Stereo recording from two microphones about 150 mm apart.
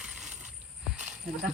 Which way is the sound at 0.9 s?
5° right (ahead or behind).